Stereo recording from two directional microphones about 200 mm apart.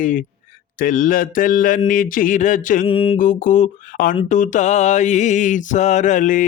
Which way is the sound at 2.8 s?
30° left (ahead or behind).